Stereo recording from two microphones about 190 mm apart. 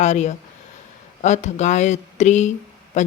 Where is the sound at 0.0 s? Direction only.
40° left (ahead or behind).